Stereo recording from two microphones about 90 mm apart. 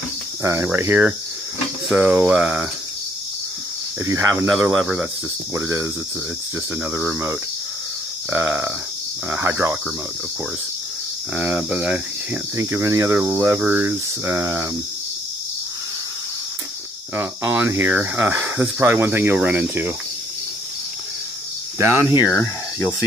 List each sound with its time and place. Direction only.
0.4 s cricket: 35° right (ahead or behind)
0.7 s speech: 20° right (ahead or behind)
4.0 s speech: 35° right (ahead or behind)
5.6 s speech: 35° right (ahead or behind)
11.3 s speech: 30° right (ahead or behind)
11.7 s speech: 20° right (ahead or behind)
12.5 s speech: 35° right (ahead or behind)
17.1 s speech: 25° right (ahead or behind)
21.7 s speech: 25° right (ahead or behind)
22.2 s speech: 35° left (ahead or behind)